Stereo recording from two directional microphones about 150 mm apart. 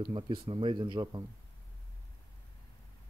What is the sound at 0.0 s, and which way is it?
Speech, 30° right (ahead or behind).